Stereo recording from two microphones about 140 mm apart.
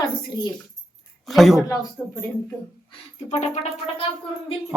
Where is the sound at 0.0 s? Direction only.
30° left (ahead or behind).